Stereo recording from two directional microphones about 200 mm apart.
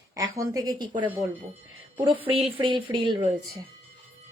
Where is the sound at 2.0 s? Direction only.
25° right (ahead or behind).